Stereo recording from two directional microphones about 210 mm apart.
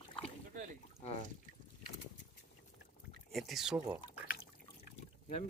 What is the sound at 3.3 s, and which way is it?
Speech, centre (ahead or behind).